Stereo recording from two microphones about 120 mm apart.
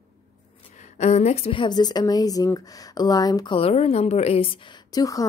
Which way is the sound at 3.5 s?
55° left (ahead or behind).